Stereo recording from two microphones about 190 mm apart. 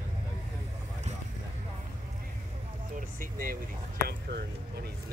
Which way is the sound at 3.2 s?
45° right (ahead or behind).